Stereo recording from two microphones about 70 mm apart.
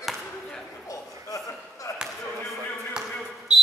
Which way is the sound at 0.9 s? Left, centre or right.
Left.